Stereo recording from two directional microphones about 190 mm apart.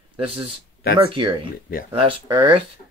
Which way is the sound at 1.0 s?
25° right (ahead or behind).